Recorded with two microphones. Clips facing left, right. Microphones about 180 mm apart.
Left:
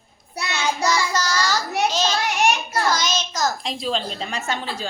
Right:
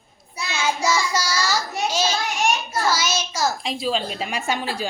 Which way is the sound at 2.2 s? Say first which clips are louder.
Left 2 dB; 70° left (ahead or behind).